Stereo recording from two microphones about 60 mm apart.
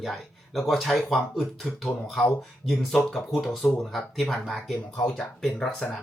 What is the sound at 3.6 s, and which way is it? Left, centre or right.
Speech, centre.